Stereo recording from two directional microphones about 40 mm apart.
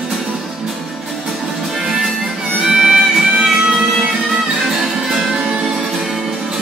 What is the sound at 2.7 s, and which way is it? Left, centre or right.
Music, centre.